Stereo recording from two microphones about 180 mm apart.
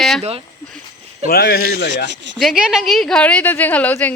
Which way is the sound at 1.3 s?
60° left (ahead or behind).